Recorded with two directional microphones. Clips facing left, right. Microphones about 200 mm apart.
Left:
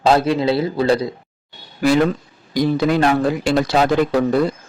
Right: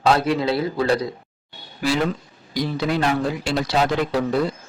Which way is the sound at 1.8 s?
55° left (ahead or behind).